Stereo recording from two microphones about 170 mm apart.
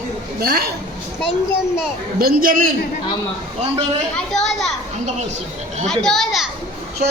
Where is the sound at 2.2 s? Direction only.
60° right (ahead or behind).